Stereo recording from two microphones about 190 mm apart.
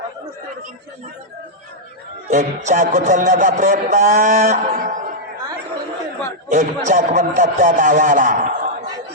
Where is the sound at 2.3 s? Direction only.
40° right (ahead or behind).